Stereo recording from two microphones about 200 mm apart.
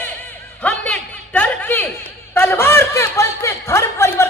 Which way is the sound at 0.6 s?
10° left (ahead or behind).